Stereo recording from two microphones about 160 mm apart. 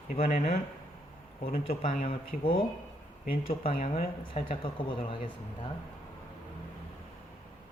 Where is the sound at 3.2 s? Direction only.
65° left (ahead or behind); by 4.6 s 45° left (ahead or behind).